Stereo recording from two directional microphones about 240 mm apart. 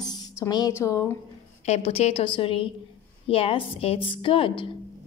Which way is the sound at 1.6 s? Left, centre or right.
Left.